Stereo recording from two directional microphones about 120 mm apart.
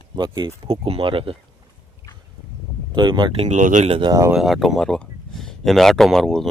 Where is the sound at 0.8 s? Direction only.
50° right (ahead or behind).